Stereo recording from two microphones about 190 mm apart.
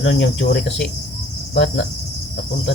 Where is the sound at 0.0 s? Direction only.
65° left (ahead or behind).